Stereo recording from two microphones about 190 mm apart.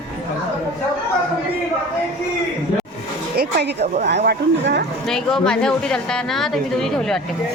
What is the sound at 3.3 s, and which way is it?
Speech, 60° right (ahead or behind).